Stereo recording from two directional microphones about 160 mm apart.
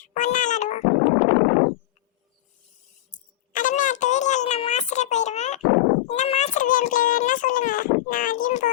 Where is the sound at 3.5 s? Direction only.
55° left (ahead or behind).